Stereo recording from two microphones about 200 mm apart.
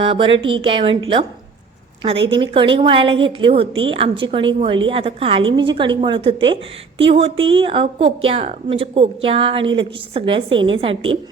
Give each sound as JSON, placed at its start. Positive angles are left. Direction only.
{"t": 0.0, "sound": "a woman's voice", "side_deg": -25}
{"t": 2.2, "sound": "a woman's voice", "side_deg": -25}